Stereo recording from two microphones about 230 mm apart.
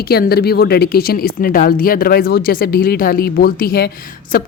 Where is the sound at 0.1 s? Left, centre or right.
Left.